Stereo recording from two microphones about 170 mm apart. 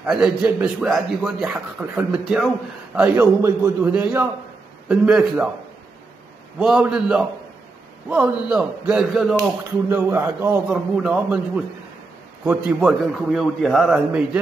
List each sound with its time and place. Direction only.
0.0 s a man's voice: 5° right (ahead or behind)
3.2 s a man's voice: 15° right (ahead or behind)
4.8 s a man's voice: 5° right (ahead or behind)
6.6 s a man's voice: 5° right (ahead or behind)
9.8 s a man's voice: 15° right (ahead or behind)
10.7 s a man's voice: 5° right (ahead or behind)